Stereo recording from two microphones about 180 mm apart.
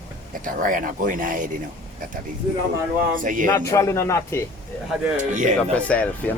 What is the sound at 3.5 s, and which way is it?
Speech, 15° left (ahead or behind).